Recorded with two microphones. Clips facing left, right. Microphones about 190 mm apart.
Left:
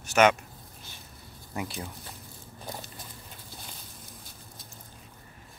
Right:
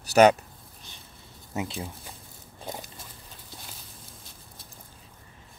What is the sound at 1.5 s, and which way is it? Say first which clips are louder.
Speech: right 3 dB; 25° right (ahead or behind).